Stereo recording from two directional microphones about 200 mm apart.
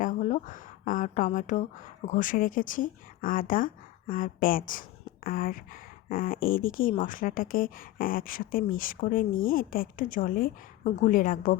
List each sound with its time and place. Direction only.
0.0 s speech: 40° left (ahead or behind)